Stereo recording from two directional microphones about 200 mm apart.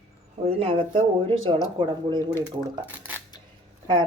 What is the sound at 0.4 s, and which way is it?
Speech, 30° right (ahead or behind).